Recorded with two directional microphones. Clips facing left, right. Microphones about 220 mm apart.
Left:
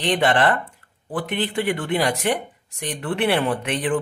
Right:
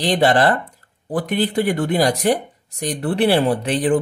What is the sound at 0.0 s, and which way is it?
Speech, 35° right (ahead or behind).